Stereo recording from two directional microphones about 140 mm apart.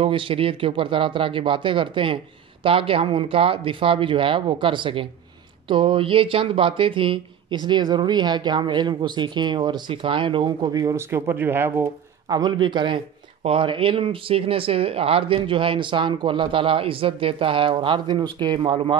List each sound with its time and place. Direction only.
0.0 s a man's voice: 40° right (ahead or behind); by 11.9 s 15° right (ahead or behind)
12.3 s a man's voice: 30° right (ahead or behind)